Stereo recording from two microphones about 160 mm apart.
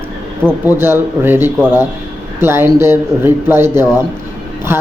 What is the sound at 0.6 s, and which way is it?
A woman's voice, 15° right (ahead or behind).